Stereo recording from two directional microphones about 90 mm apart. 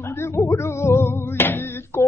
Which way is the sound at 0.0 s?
30° left (ahead or behind).